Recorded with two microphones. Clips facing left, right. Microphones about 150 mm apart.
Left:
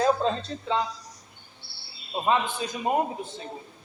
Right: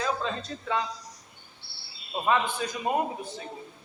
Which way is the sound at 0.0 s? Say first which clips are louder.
Left 7 dB; 35° left (ahead or behind).